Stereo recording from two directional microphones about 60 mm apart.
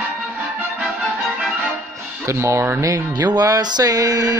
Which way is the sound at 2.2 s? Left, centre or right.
Right.